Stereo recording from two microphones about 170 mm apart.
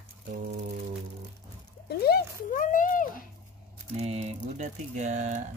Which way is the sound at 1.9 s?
65° left (ahead or behind).